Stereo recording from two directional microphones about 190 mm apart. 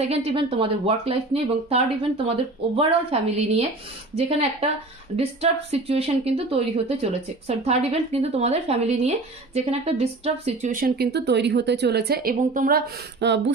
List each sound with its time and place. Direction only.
0.1 s speech: 30° right (ahead or behind); by 13.4 s 65° right (ahead or behind)